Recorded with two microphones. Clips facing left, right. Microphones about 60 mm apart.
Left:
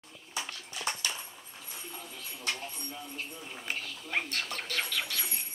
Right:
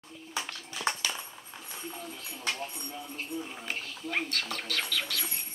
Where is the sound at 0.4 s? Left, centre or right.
Right.